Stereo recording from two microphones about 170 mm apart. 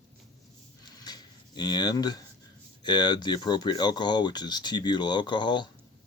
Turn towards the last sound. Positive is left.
turn(degrees=25)  # may be behind; listen again after turning